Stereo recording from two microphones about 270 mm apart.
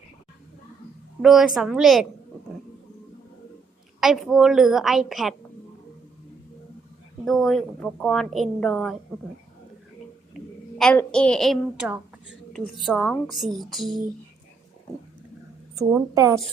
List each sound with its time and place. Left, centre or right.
1.2 s a woman's voice: centre
4.0 s a woman's voice: centre
7.3 s a woman's voice: centre
10.8 s a woman's voice: centre
15.8 s a woman's voice: centre